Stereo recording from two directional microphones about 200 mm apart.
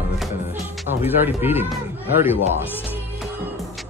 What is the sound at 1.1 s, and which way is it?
Speech, 10° right (ahead or behind).